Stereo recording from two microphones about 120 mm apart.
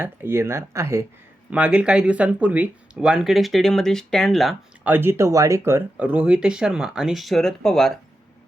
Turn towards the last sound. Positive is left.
turn(degrees=5)  # may be behind; listen again after turning